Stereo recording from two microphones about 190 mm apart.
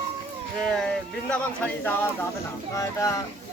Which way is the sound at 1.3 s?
5° left (ahead or behind).